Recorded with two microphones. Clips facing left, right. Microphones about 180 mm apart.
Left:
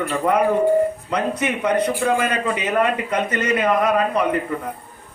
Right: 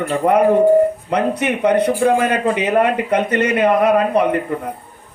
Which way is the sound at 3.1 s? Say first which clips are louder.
Right 6 dB; 60° right (ahead or behind).